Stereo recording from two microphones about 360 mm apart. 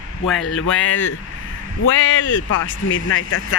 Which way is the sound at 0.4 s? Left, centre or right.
Left.